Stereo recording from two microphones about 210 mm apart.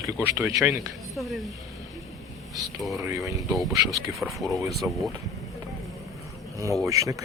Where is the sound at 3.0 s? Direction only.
15° right (ahead or behind).